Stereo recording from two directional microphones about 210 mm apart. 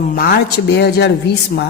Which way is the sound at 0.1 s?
45° left (ahead or behind).